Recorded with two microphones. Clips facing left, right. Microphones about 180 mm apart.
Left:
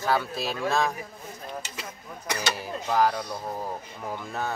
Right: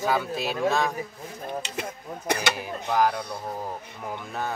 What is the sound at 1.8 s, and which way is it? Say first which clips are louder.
Speech: right 6 dB; 60° right (ahead or behind).